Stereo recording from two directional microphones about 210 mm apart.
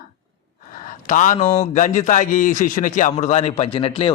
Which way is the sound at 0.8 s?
35° left (ahead or behind).